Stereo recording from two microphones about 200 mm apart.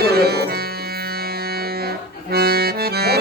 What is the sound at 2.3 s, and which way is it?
Accordion, 50° right (ahead or behind).